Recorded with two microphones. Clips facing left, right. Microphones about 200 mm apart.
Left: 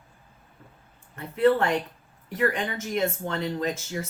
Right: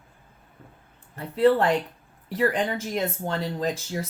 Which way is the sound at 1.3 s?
35° right (ahead or behind).